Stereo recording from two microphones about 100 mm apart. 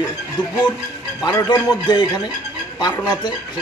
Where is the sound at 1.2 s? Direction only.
45° left (ahead or behind).